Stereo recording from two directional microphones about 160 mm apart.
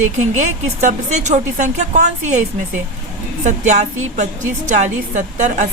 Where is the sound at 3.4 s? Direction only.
45° right (ahead or behind).